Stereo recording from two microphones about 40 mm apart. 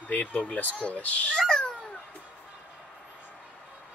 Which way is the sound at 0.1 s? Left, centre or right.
Left.